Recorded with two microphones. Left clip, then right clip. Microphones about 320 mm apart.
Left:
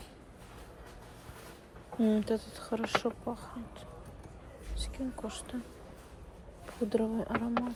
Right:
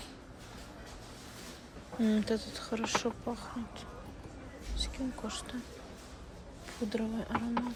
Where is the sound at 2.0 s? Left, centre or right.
Centre.